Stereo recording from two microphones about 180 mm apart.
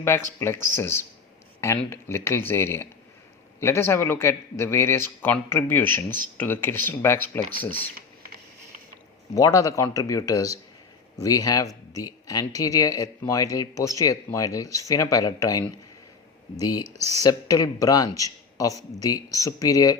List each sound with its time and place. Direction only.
0.0 s speech: 15° left (ahead or behind)
9.3 s speech: 20° left (ahead or behind)